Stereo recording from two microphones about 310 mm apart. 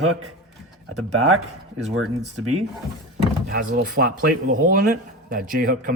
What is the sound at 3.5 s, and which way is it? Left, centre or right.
Speech, right.